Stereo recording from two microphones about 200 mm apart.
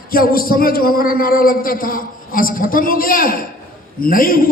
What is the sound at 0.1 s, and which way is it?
A man's voice, 45° left (ahead or behind).